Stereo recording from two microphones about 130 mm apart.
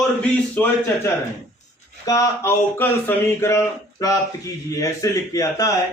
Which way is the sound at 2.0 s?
25° left (ahead or behind).